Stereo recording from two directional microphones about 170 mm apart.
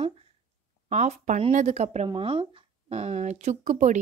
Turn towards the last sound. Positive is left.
turn(degrees=-45)  # may be behind; listen again after turning